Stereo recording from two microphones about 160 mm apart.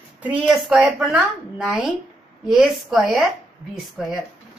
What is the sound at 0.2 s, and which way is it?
A woman's voice, 5° right (ahead or behind).